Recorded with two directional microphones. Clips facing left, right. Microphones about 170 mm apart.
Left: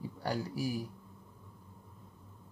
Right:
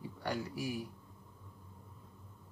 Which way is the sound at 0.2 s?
35° left (ahead or behind).